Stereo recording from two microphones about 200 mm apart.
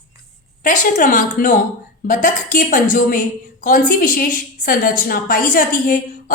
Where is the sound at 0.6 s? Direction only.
40° left (ahead or behind).